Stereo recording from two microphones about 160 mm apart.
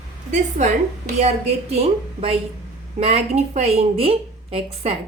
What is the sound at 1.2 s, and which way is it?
Speech, 40° right (ahead or behind).